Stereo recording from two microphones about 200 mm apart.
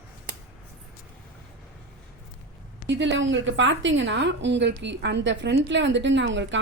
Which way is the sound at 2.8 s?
65° right (ahead or behind).